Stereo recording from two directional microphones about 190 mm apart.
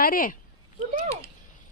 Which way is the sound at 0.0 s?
45° left (ahead or behind).